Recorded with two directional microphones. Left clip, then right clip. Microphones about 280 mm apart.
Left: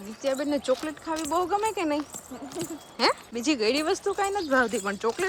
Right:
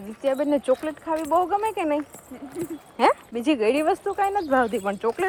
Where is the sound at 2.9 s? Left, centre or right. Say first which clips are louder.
Right 5 dB; centre.